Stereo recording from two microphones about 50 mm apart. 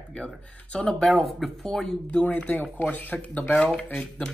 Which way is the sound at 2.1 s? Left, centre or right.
Left.